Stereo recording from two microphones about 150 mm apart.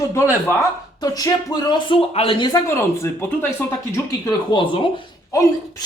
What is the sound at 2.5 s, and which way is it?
Speech, 20° left (ahead or behind).